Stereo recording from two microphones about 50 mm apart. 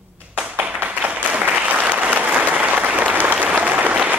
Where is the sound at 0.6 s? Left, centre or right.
Right.